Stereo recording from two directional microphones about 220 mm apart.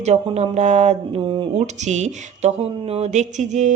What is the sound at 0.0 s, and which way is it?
Speech, 30° right (ahead or behind).